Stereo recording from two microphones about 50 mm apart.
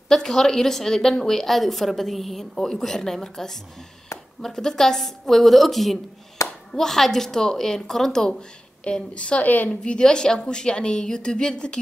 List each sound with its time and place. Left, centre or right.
0.1 s a woman's voice: centre; by 9.7 s left
9.7 s a woman's voice: centre